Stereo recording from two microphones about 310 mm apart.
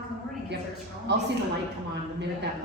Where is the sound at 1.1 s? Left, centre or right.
Right.